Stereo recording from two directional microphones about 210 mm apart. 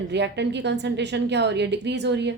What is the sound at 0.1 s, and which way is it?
A woman's voice, 55° right (ahead or behind).